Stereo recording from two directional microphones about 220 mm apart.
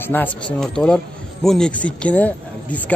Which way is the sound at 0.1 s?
5° left (ahead or behind).